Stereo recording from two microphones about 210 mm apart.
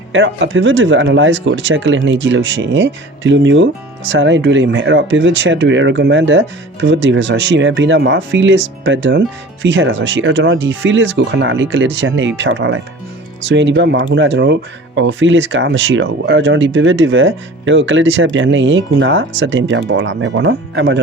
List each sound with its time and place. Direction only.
0.1 s speech: 60° right (ahead or behind)